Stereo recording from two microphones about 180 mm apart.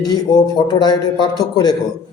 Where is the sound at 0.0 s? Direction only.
25° left (ahead or behind).